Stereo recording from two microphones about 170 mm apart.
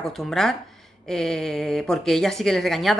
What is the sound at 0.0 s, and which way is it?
Speech, centre (ahead or behind).